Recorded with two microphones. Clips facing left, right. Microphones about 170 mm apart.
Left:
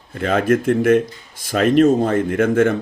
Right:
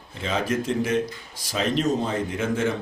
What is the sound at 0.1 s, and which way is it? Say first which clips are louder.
Speech: left 9 dB; 55° left (ahead or behind).